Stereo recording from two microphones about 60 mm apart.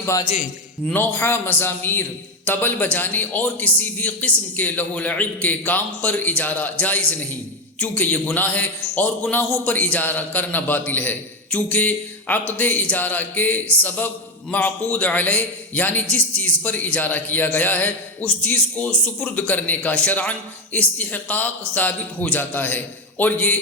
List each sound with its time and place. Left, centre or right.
0.9 s a man's voice: left